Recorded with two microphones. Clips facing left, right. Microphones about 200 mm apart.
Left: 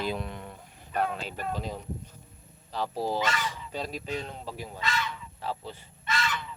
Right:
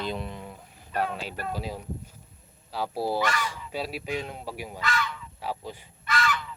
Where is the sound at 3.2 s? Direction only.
20° left (ahead or behind).